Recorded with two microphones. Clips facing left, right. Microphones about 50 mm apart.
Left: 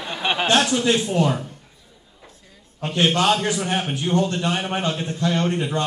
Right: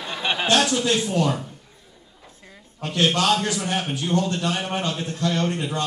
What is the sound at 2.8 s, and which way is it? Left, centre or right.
A man's voice, centre.